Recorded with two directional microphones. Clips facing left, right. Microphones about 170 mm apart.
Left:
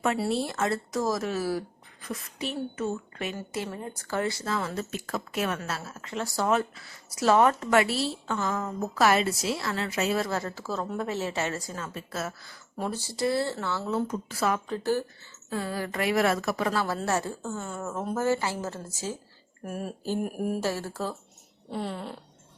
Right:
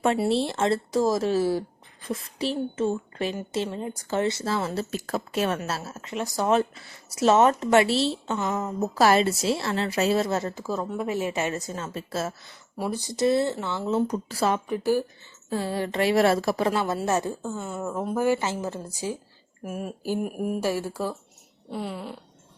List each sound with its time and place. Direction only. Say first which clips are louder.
0.0 s speech: right 4 dB; 30° right (ahead or behind)
9.0 s speech: right 3 dB; 30° right (ahead or behind)
12.7 s speech: right 3 dB; 10° right (ahead or behind)
14.1 s speech: right 3 dB; 35° right (ahead or behind)
14.7 s a woman's voice: right 4 dB; 10° right (ahead or behind)
15.4 s a woman's voice: right 4 dB; 25° right (ahead or behind)
19.6 s speech: right 2 dB; 5° right (ahead or behind)
20.6 s a woman's voice: right 3 dB; 10° right (ahead or behind)